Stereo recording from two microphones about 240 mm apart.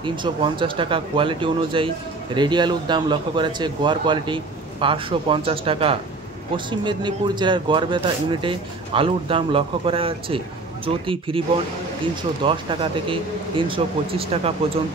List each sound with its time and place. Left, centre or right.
0.0 s speech: centre
12.4 s speech: right